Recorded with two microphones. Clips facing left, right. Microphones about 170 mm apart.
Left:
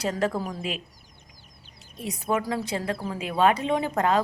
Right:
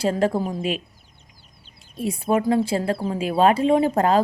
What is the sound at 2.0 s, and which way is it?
A woman's voice, 30° right (ahead or behind).